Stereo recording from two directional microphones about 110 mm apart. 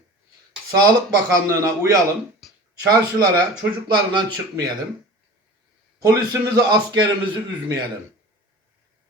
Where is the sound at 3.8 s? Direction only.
45° right (ahead or behind).